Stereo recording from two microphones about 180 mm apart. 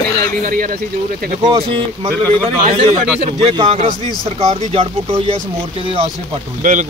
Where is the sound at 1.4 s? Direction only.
30° right (ahead or behind).